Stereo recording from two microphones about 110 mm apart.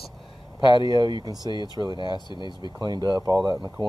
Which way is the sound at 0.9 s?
40° right (ahead or behind).